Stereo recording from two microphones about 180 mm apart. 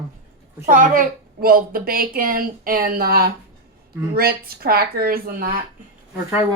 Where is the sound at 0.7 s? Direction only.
50° right (ahead or behind).